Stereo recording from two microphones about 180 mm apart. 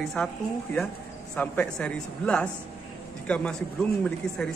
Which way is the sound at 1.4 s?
10° left (ahead or behind).